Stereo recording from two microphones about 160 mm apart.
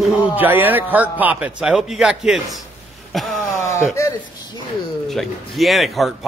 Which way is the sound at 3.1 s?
Centre (ahead or behind).